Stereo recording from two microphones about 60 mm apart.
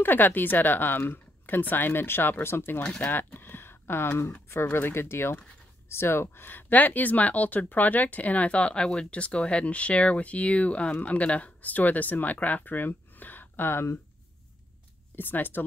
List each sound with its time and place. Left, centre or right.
0.0 s speech: left
15.1 s speech: left